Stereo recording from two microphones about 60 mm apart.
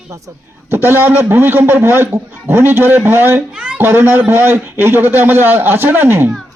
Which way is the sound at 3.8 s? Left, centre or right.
Right.